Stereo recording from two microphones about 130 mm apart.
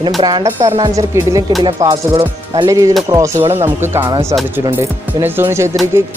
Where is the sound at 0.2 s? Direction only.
30° right (ahead or behind).